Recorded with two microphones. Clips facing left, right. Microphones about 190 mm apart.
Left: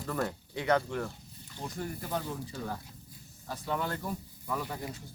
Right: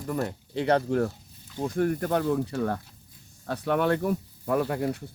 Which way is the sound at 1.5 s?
55° right (ahead or behind).